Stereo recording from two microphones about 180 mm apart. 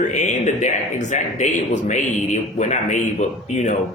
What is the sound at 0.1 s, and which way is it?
Speech, 40° left (ahead or behind).